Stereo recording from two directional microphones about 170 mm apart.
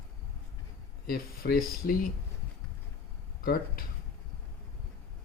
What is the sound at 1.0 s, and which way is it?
Speech, 60° left (ahead or behind).